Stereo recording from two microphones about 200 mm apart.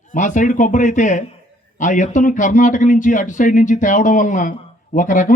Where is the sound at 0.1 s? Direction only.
40° left (ahead or behind).